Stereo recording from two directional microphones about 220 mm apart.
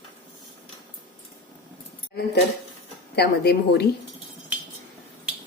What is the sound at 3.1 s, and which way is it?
Speech, 45° left (ahead or behind).